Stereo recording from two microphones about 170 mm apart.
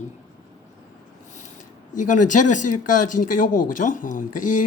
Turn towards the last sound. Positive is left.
turn(degrees=50)  # may be behind; listen again after turning